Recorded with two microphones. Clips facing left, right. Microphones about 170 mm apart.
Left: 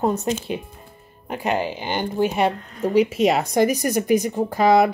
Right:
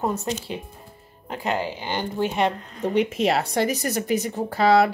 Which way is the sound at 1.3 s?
15° left (ahead or behind).